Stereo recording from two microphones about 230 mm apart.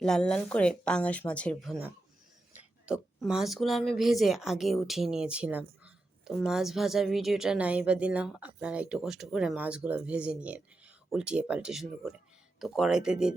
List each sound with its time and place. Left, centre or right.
0.0 s speech: centre